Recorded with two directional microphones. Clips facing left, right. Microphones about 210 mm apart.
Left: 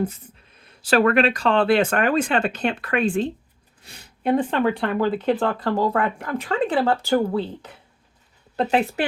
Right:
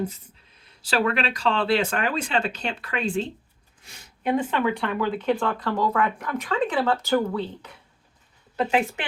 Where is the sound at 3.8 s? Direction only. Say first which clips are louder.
Left 4 dB; 35° left (ahead or behind).